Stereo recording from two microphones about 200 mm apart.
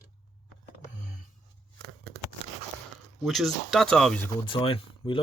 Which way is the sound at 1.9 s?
90° right.